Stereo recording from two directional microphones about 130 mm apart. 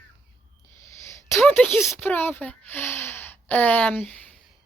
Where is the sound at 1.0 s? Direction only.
20° left (ahead or behind).